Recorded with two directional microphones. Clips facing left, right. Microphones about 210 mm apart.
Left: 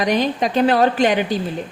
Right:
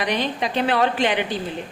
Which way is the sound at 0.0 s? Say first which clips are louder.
Left 5 dB; 45° left (ahead or behind).